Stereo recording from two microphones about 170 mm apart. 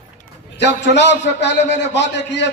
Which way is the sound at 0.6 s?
90° left.